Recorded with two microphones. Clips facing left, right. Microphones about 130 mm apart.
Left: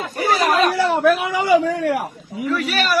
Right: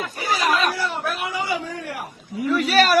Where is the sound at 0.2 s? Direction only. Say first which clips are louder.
Left 5 dB; 60° left (ahead or behind).